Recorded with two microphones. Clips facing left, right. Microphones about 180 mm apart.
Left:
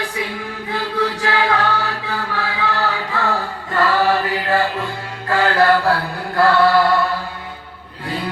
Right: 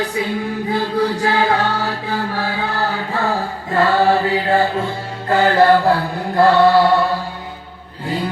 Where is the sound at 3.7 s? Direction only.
35° right (ahead or behind).